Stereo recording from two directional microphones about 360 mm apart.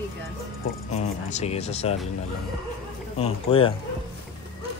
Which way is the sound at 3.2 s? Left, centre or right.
Centre.